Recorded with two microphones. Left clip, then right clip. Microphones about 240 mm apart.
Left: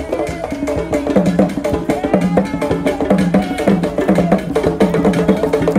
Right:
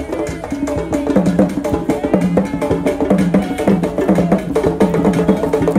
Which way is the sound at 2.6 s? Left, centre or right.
Right.